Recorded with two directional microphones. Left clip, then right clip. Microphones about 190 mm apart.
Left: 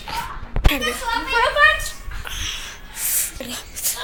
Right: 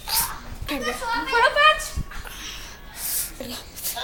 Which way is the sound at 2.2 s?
5° left (ahead or behind).